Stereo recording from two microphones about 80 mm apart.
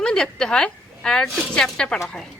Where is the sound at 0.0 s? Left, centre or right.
Centre.